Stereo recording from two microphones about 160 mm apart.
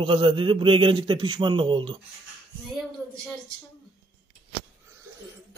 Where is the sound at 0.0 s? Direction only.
30° right (ahead or behind).